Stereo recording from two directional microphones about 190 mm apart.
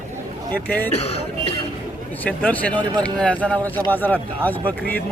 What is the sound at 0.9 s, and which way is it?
Speech, 35° left (ahead or behind).